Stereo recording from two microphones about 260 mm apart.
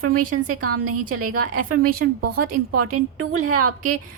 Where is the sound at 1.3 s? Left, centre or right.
Right.